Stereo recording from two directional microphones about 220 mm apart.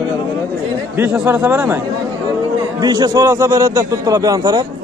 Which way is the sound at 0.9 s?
10° right (ahead or behind).